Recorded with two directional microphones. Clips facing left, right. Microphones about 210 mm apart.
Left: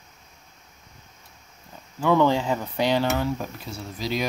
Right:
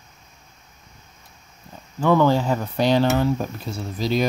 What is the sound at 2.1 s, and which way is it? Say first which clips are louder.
Speech: right 2 dB; 10° right (ahead or behind).